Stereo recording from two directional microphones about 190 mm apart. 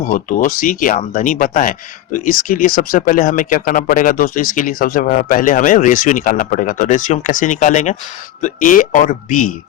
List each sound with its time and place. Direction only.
0.0 s speech: 45° left (ahead or behind)